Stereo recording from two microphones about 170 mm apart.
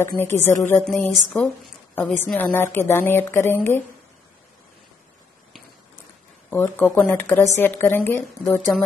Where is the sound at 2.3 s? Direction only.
10° left (ahead or behind).